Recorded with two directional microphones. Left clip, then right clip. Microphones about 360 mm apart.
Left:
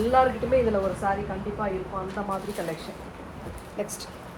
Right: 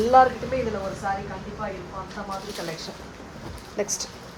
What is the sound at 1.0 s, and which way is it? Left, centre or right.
Speech, centre.